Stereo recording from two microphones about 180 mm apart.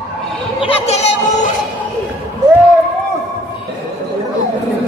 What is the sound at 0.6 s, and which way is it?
Speech, 35° left (ahead or behind).